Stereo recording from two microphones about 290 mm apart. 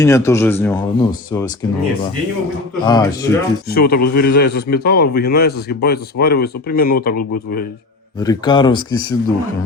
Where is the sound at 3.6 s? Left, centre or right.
Left.